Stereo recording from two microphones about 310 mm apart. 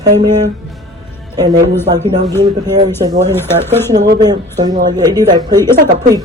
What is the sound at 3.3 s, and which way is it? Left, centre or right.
Speech, centre.